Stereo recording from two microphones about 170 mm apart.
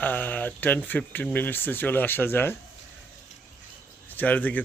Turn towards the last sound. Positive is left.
turn(degrees=10)  # may be behind; listen again after turning